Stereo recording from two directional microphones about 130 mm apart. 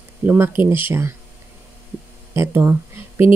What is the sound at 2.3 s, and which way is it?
Speech, 20° right (ahead or behind).